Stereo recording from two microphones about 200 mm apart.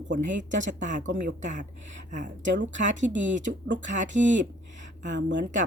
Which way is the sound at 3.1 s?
65° right (ahead or behind).